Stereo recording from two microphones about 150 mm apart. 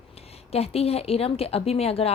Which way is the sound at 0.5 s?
40° left (ahead or behind).